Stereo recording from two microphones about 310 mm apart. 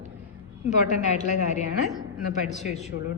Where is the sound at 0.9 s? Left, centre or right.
Left.